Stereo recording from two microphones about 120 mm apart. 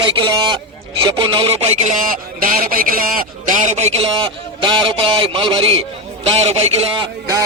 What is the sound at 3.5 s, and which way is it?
Speech, 75° right (ahead or behind).